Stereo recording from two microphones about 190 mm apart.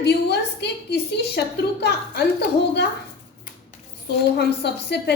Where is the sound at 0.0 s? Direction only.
60° left (ahead or behind).